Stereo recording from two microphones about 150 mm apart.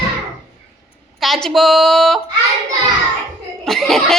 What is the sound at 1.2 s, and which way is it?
A woman's voice, centre (ahead or behind).